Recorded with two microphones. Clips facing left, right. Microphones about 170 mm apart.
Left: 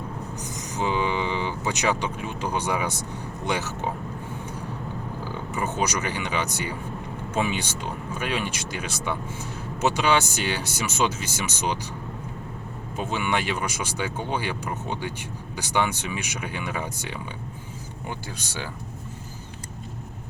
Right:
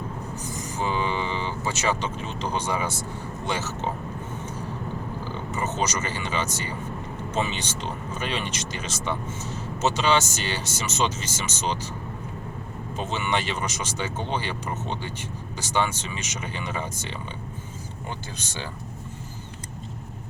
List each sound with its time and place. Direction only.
0.4 s speech: 20° left (ahead or behind)
5.2 s speech: 10° left (ahead or behind)
13.0 s speech: 10° left (ahead or behind)
18.3 s speech: 10° left (ahead or behind)